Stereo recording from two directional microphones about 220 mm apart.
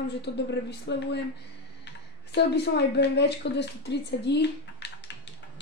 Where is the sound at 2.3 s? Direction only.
50° left (ahead or behind).